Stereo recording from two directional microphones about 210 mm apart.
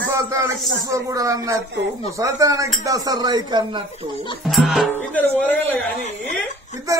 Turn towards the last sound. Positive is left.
turn(degrees=-15)  # may be behind; listen again after turning